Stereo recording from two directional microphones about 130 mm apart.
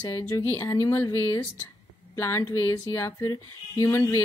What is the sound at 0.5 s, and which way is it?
Speech, 20° left (ahead or behind).